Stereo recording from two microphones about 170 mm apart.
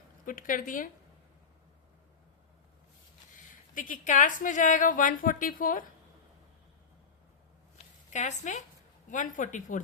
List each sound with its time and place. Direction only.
0.3 s a woman's voice: 55° left (ahead or behind)
3.8 s a woman's voice: 50° left (ahead or behind)
8.1 s a woman's voice: 45° left (ahead or behind)